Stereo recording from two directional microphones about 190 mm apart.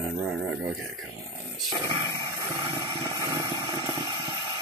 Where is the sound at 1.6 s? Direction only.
20° right (ahead or behind).